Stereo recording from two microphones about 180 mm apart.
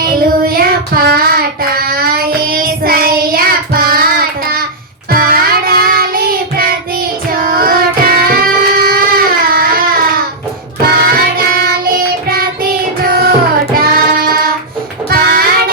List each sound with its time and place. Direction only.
0.0 s child singing: 55° right (ahead or behind)
7.4 s music: 55° right (ahead or behind)
10.8 s music: 55° right (ahead or behind)
13.1 s music: 55° right (ahead or behind)
13.7 s child singing: 55° right (ahead or behind)